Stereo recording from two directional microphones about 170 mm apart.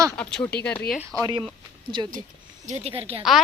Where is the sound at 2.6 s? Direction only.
40° right (ahead or behind).